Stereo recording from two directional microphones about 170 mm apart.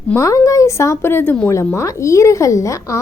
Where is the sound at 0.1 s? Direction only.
20° left (ahead or behind).